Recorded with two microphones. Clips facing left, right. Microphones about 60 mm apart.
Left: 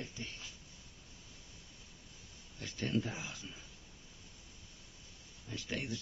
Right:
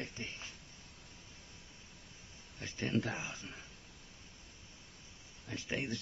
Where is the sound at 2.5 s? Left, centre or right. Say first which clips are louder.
Right 1 dB; right.